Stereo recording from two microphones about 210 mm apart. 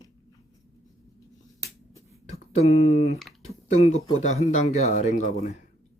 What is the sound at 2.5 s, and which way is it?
Speech, 30° left (ahead or behind).